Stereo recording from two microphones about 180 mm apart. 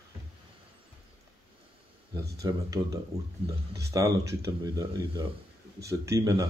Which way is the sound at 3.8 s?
20° right (ahead or behind).